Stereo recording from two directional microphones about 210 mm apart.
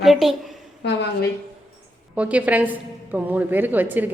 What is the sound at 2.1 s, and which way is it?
A woman's voice, 5° right (ahead or behind).